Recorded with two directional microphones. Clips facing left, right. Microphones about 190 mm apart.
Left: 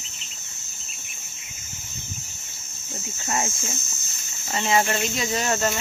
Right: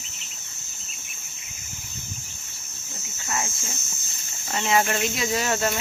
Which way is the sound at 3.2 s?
30° left (ahead or behind).